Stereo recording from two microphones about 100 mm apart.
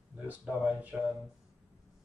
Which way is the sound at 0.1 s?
15° right (ahead or behind).